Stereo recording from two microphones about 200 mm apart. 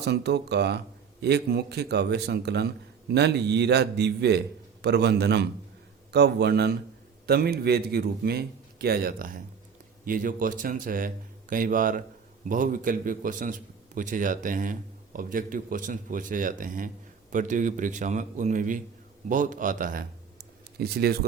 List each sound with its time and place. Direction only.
0.0 s a man's voice: 55° right (ahead or behind)